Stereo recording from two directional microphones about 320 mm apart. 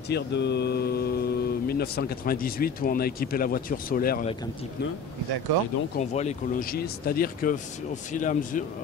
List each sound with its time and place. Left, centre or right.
0.1 s speech: left
5.9 s speech: left